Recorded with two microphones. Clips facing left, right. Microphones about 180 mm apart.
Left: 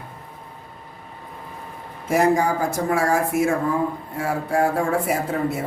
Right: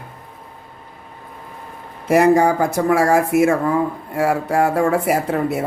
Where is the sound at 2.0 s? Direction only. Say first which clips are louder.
Right 5 dB; 70° right (ahead or behind).